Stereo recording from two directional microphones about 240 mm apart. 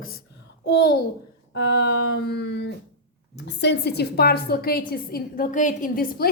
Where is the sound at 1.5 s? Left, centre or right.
Left.